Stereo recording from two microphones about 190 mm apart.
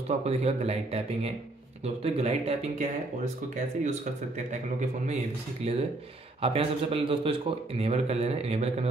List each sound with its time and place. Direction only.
0.2 s a man's voice: 35° right (ahead or behind)